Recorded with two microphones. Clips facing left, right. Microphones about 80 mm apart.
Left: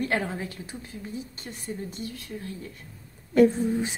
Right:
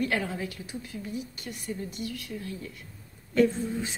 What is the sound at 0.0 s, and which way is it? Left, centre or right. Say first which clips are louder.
A woman's voice: left 1 dB; left.